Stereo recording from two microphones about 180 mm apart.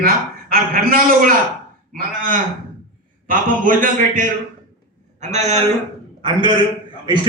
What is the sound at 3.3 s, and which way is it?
A man's voice, 45° right (ahead or behind).